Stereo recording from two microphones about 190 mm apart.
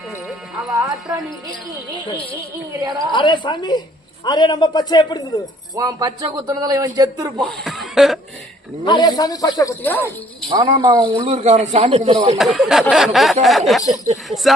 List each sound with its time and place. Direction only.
0.7 s speech: 15° right (ahead or behind)
3.1 s a woman's voice: 25° left (ahead or behind)
5.7 s a man's voice: 15° right (ahead or behind)
7.4 s speech: centre (ahead or behind)
8.8 s a woman's voice: 20° left (ahead or behind)
10.5 s a man's voice: 20° right (ahead or behind)
12.4 s speech: centre (ahead or behind)